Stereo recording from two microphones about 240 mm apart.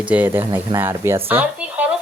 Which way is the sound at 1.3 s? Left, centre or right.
Centre.